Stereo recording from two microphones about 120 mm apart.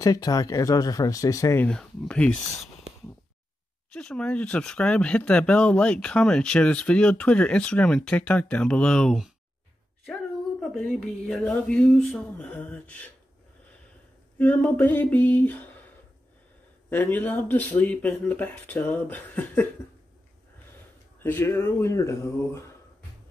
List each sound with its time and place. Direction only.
0.0 s speech: 30° left (ahead or behind)
1.6 s speech: 5° left (ahead or behind)
3.9 s speech: 5° left (ahead or behind)
10.6 s speech: centre (ahead or behind)
14.4 s speech: 15° left (ahead or behind)
16.9 s speech: 15° left (ahead or behind)
21.2 s speech: 20° left (ahead or behind)